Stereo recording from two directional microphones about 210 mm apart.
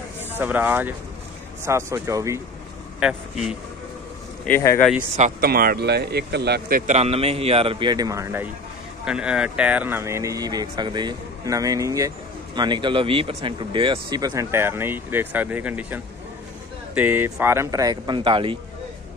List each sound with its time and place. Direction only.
0.4 s speech: 10° right (ahead or behind)
3.0 s a man's voice: 5° right (ahead or behind)
4.5 s speech: 10° left (ahead or behind)
5.4 s speech: 45° right (ahead or behind)
6.9 s a man's voice: 30° right (ahead or behind)